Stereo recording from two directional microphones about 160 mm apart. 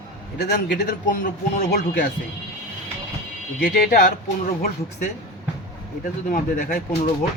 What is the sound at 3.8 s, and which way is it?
Speech, 60° left (ahead or behind).